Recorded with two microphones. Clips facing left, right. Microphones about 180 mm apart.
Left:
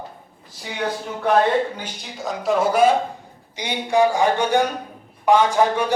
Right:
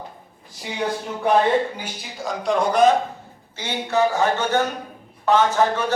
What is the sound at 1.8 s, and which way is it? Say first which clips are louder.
A man's voice: even; centre (ahead or behind).